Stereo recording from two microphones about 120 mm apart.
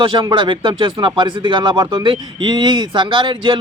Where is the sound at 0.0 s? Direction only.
45° right (ahead or behind).